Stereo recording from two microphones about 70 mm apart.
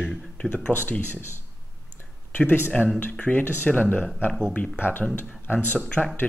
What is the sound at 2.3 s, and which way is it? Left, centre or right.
Speech, left.